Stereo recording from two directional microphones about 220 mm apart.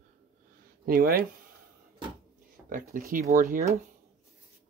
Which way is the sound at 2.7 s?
40° right (ahead or behind).